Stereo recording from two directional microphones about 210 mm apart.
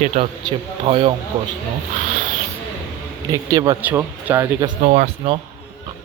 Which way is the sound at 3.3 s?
15° right (ahead or behind).